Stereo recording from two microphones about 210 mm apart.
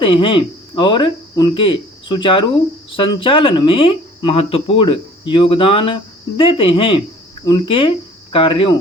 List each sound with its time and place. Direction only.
0.0 s speech: 25° left (ahead or behind)